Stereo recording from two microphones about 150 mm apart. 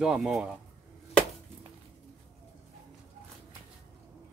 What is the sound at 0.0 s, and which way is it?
Speech, 5° right (ahead or behind).